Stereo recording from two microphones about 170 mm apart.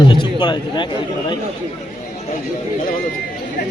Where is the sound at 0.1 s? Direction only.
25° left (ahead or behind).